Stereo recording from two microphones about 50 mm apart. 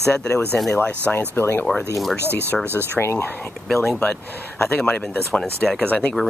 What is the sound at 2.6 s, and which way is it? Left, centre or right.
Speech, right.